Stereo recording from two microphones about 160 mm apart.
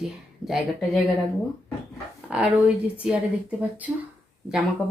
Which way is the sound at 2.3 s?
5° right (ahead or behind).